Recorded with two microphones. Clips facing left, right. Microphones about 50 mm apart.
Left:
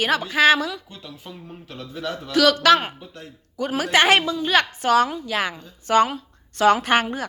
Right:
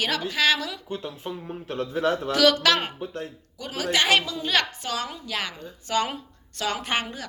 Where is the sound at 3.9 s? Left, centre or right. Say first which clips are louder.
Left 5 dB; left.